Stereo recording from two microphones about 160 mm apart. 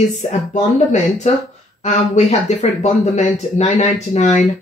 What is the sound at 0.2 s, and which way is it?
Speech, 40° left (ahead or behind).